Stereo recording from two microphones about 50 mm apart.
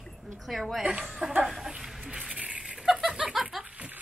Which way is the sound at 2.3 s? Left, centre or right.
Right.